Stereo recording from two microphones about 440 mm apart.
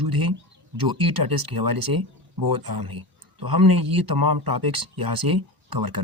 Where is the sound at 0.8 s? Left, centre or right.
Right.